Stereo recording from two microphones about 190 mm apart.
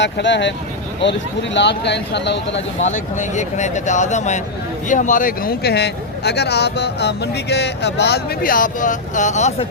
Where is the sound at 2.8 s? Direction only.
40° left (ahead or behind).